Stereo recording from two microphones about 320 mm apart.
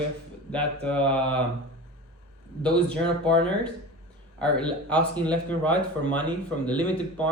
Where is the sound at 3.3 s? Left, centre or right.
Centre.